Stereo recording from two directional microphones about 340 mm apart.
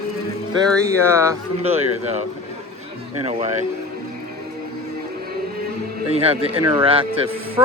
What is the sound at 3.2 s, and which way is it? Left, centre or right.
Speech, centre.